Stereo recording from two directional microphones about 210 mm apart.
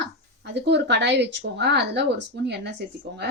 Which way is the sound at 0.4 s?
55° right (ahead or behind).